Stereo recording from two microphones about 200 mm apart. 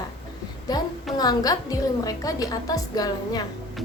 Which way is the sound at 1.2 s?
20° left (ahead or behind).